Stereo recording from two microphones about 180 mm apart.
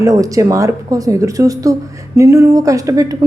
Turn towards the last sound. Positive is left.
turn(degrees=-20)  # may be behind; listen again after turning